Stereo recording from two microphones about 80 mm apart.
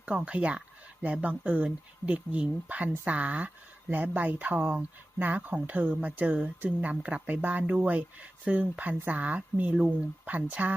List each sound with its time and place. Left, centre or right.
0.0 s a woman's voice: centre